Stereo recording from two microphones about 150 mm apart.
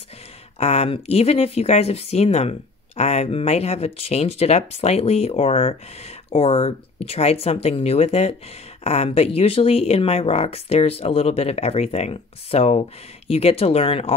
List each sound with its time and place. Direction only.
0.6 s speech: 45° left (ahead or behind)